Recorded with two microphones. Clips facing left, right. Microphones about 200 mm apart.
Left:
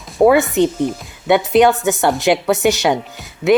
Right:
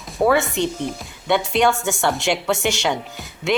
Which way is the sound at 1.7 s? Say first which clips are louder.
Left 5 dB; centre (ahead or behind).